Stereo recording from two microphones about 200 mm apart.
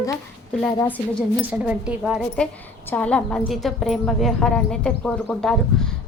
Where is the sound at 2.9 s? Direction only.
5° left (ahead or behind).